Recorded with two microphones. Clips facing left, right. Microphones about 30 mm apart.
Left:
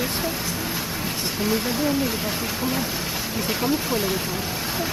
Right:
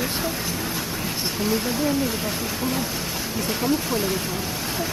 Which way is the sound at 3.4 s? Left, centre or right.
Centre.